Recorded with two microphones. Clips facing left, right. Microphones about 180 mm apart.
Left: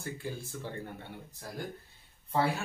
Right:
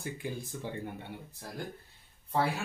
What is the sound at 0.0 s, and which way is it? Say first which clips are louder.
Speech: right 1 dB; 15° right (ahead or behind).